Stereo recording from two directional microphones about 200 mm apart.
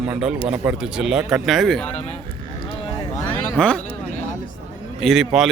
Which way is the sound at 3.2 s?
5° left (ahead or behind).